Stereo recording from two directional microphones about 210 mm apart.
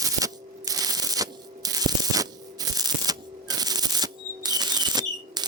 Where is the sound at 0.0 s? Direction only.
15° right (ahead or behind).